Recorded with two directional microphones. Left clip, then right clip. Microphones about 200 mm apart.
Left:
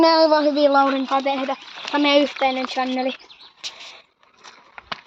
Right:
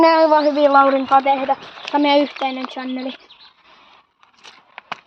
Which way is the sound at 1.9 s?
30° left (ahead or behind).